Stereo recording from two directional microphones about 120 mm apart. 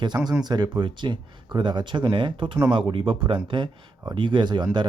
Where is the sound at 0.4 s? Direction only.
35° right (ahead or behind).